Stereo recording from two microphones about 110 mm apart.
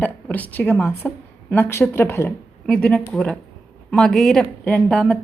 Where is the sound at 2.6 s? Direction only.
5° left (ahead or behind).